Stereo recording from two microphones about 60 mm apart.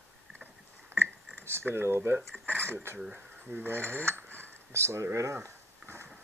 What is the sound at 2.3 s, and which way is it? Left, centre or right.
Dishes, centre.